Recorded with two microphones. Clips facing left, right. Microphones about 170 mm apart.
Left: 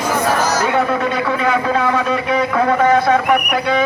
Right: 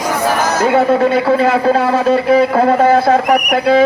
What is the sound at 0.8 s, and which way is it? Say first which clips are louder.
A man's voice: right 6 dB; 30° right (ahead or behind).